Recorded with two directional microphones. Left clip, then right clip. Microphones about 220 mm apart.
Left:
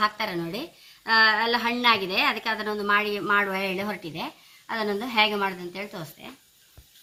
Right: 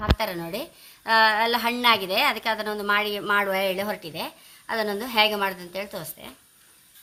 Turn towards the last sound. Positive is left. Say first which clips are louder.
# right 2 dB
turn(degrees=-50)  # may be behind; listen again after turning